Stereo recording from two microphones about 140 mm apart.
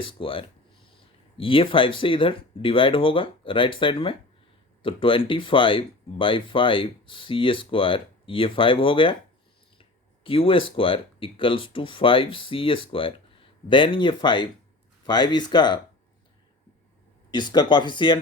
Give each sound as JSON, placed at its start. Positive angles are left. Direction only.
{"t": 0.0, "sound": "speech", "side_deg": 40}
{"t": 10.2, "sound": "speech", "side_deg": 40}
{"t": 17.3, "sound": "speech", "side_deg": 30}